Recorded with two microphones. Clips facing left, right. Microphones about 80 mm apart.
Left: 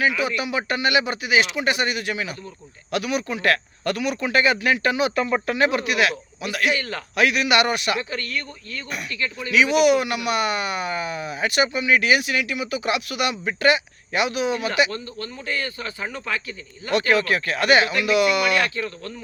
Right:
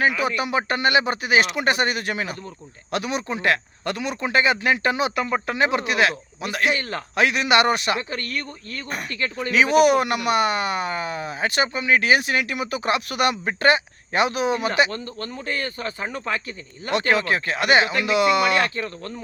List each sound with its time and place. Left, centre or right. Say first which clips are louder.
0.0 s speech: right 1 dB; right
5.1 s speech: left 1 dB; centre
5.5 s speech: left 1 dB; right
16.9 s speech: left 1 dB; right